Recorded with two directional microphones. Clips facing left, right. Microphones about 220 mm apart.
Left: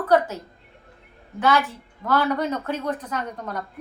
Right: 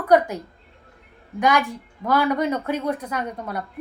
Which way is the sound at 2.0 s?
10° right (ahead or behind).